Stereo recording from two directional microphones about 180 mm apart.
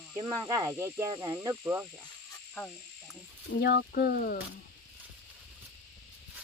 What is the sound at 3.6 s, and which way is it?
Speech, 65° left (ahead or behind).